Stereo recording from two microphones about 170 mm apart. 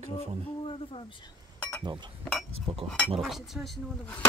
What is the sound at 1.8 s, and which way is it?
Speech, 25° right (ahead or behind).